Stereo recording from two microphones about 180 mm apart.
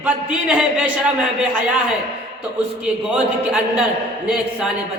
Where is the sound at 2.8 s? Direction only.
5° right (ahead or behind).